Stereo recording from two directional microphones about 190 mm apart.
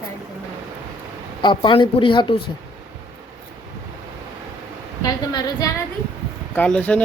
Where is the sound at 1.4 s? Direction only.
25° left (ahead or behind).